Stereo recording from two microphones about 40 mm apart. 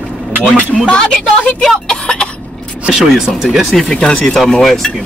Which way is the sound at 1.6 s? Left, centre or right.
Centre.